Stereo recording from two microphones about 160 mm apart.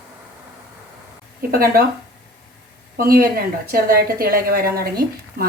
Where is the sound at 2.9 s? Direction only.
65° right (ahead or behind).